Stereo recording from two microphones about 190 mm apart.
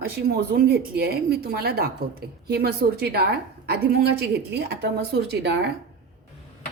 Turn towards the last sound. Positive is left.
turn(degrees=-60)  # may be behind; listen again after turning